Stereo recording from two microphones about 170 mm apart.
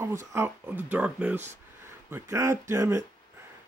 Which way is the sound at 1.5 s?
15° right (ahead or behind).